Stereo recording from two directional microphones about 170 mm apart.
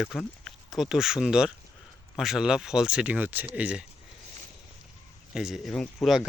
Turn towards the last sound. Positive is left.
turn(degrees=0)  # may be behind; listen again after turning